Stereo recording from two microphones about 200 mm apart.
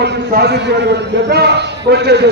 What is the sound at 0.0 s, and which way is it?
A man's voice, 55° right (ahead or behind).